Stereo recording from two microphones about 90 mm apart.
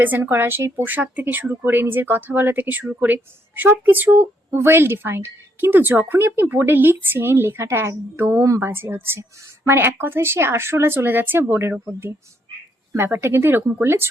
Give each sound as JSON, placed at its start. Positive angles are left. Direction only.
{"t": 0.0, "sound": "speech", "side_deg": -25}
{"t": 13.2, "sound": "speech", "side_deg": -25}